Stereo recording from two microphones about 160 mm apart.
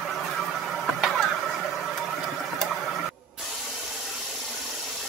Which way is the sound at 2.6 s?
Centre (ahead or behind).